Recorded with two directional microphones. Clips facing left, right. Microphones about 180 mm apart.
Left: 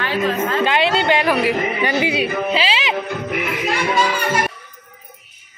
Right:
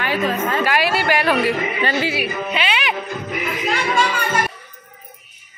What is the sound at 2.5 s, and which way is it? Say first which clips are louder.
Music: left 2 dB; 30° left (ahead or behind).